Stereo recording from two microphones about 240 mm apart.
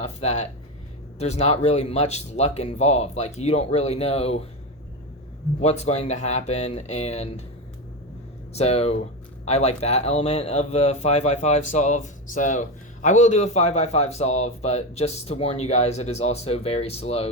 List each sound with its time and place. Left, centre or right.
0.0 s speech: left
5.6 s speech: left
8.5 s speech: left